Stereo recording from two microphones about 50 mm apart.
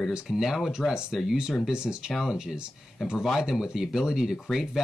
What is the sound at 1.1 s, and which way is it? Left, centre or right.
Speech, centre.